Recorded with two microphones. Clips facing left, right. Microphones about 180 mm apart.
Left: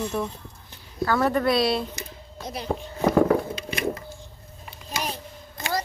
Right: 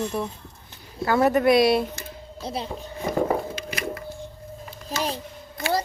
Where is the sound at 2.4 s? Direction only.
30° right (ahead or behind).